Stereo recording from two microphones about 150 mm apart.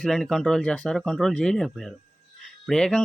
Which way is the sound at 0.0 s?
Centre (ahead or behind).